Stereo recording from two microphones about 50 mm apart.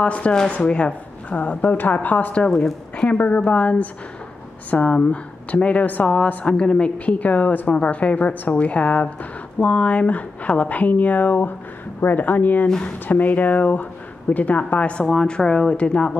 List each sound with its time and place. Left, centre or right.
0.0 s a woman's voice: left